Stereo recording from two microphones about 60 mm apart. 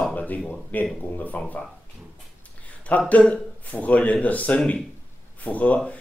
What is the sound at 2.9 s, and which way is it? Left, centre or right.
Speech, left.